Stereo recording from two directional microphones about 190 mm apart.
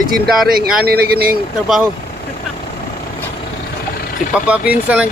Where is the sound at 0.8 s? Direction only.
55° right (ahead or behind).